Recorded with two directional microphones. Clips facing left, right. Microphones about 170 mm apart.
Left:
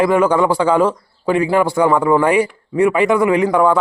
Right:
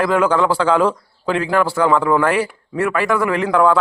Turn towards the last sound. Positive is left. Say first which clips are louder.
# left 2 dB
turn(degrees=10)  # may be behind; listen again after turning